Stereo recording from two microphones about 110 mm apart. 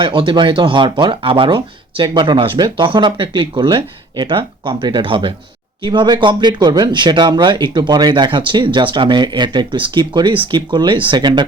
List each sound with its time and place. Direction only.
0.0 s speech: 50° right (ahead or behind)